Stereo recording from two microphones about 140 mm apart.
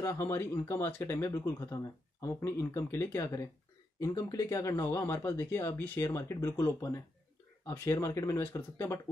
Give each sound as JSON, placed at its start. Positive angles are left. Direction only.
{"t": 0.0, "sound": "speech", "side_deg": 20}